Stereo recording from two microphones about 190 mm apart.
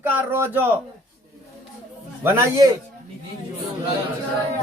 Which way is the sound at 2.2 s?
15° right (ahead or behind).